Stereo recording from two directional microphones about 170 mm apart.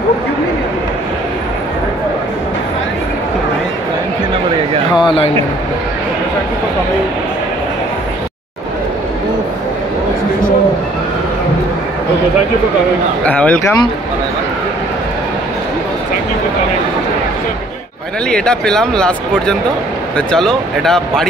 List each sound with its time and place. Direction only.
5.0 s speech: 35° left (ahead or behind)
13.2 s speech: 10° left (ahead or behind)
18.3 s speech: 5° left (ahead or behind)